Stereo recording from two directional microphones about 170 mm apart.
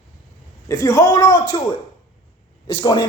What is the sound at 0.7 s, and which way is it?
Speech, 20° left (ahead or behind).